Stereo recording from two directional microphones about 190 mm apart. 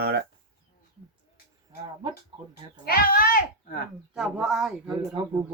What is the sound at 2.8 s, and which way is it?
Speech, 55° left (ahead or behind).